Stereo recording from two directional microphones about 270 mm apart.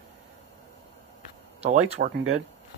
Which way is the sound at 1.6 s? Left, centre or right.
Right.